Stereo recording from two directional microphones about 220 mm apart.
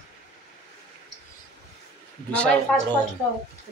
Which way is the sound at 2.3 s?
5° left (ahead or behind).